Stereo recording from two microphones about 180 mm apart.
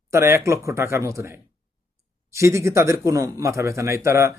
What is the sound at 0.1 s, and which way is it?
A man's voice, 15° right (ahead or behind).